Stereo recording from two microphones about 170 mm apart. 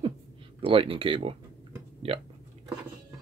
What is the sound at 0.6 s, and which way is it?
Speech, 35° right (ahead or behind).